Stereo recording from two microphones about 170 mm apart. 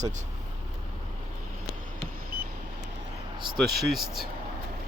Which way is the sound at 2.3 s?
60° right (ahead or behind).